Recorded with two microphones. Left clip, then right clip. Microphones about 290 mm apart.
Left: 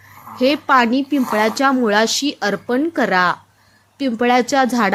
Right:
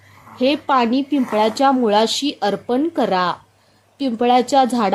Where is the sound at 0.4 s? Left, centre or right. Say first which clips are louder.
Left 2 dB; centre.